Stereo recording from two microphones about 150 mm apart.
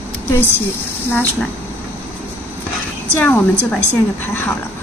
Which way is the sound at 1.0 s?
15° left (ahead or behind).